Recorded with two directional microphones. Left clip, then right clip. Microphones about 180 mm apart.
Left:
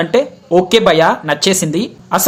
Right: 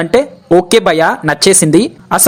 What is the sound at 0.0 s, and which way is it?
Speech, 40° right (ahead or behind).